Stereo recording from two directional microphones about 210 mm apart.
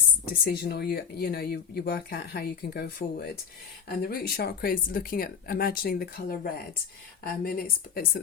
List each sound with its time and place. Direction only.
0.4 s speech: 50° left (ahead or behind)